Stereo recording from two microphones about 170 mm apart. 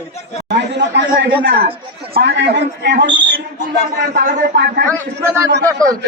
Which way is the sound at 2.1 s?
90° right.